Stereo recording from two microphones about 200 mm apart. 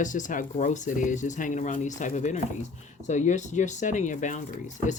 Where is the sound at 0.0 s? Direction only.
40° left (ahead or behind).